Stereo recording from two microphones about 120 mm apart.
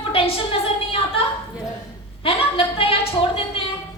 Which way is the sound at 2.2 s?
50° left (ahead or behind).